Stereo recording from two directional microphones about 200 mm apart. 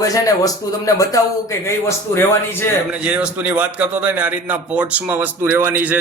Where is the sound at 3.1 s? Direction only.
5° right (ahead or behind).